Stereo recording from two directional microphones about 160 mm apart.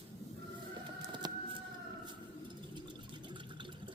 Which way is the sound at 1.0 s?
25° right (ahead or behind).